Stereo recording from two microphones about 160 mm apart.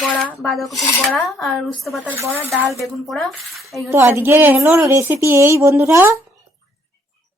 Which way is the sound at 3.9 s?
15° right (ahead or behind).